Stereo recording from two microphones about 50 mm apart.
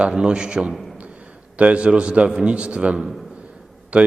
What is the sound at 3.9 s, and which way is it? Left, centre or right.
Speech, right.